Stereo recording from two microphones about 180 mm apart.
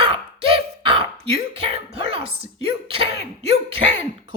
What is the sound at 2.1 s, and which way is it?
Speech, 30° right (ahead or behind).